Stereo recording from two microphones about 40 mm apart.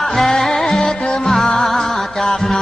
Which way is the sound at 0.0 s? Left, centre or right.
Centre.